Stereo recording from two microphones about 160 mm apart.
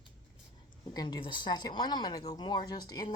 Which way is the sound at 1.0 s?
30° left (ahead or behind).